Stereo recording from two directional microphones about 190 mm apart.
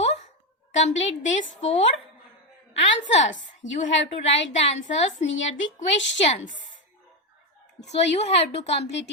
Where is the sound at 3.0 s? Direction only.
35° left (ahead or behind).